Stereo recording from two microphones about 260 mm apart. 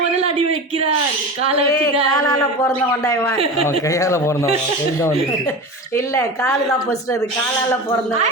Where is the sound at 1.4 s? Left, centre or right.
Right.